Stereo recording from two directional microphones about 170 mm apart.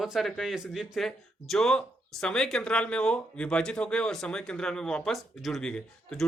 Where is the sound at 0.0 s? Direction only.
Centre (ahead or behind).